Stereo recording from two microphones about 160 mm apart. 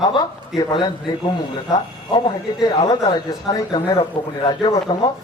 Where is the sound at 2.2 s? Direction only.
25° left (ahead or behind).